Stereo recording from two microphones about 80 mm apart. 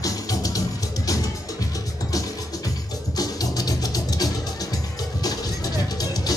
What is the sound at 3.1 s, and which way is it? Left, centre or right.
Music, left.